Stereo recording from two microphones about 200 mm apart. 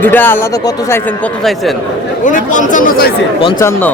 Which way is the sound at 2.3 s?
40° left (ahead or behind).